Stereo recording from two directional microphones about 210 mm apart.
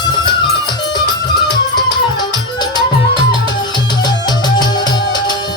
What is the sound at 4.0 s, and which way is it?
Music, 20° left (ahead or behind).